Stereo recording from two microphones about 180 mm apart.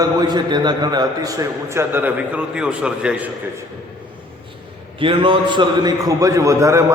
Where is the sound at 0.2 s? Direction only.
20° right (ahead or behind); by 3.2 s 5° right (ahead or behind).